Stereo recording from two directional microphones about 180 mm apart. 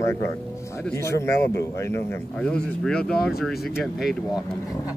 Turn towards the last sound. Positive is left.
turn(degrees=-5)  # may be behind; listen again after turning